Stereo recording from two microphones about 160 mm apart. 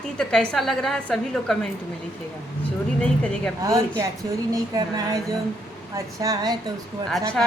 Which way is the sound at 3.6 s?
20° right (ahead or behind).